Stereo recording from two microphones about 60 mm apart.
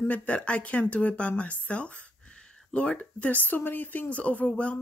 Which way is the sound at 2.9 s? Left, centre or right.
Left.